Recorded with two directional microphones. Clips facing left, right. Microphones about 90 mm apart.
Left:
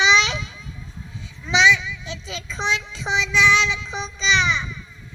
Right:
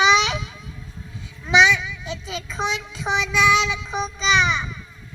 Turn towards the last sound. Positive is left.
turn(degrees=-45)  # may be behind; listen again after turning